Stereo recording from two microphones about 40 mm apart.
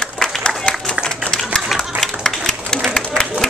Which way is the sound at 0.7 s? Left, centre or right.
Centre.